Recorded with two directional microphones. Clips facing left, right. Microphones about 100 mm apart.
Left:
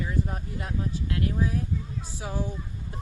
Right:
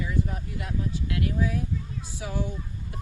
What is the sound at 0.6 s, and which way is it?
Speech, 35° left (ahead or behind).